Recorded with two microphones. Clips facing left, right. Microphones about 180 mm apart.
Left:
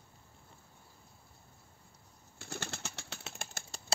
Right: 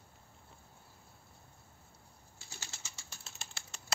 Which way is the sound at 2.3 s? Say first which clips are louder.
Left 11 dB; 60° left (ahead or behind).